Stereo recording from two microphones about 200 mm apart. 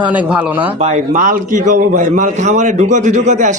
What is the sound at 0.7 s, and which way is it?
A man's voice, 35° right (ahead or behind).